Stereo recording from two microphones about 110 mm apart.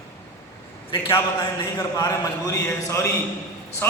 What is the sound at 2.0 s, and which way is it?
Speech, 30° left (ahead or behind).